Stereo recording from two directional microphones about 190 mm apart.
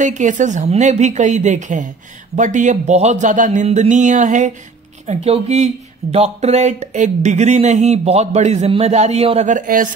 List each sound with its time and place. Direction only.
0.0 s speech: 40° right (ahead or behind)